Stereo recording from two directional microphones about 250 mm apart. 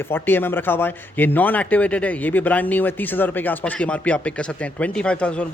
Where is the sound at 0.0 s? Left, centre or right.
Centre.